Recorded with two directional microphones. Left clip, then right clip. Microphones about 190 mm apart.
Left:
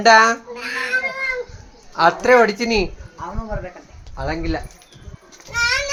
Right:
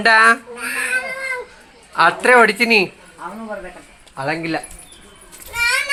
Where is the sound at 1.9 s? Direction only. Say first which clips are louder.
Right 1 dB; 10° right (ahead or behind).